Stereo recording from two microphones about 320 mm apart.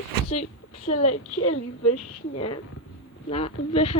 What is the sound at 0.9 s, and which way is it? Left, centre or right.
A woman's voice, left.